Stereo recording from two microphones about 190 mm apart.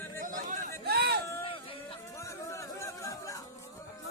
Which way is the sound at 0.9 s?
55° right (ahead or behind).